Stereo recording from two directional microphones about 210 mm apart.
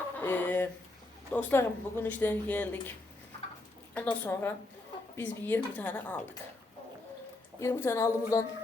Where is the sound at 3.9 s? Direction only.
10° left (ahead or behind).